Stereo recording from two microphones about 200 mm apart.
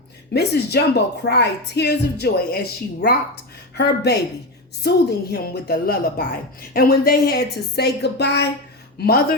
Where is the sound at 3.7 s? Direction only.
55° left (ahead or behind).